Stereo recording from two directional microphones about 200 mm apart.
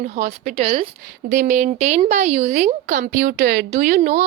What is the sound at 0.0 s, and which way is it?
Speech, 35° right (ahead or behind).